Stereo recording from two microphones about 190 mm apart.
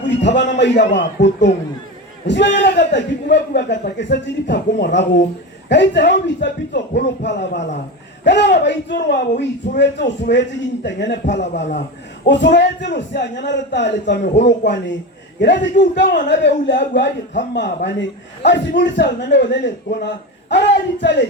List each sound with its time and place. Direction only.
0.2 s a man's voice: 70° left (ahead or behind)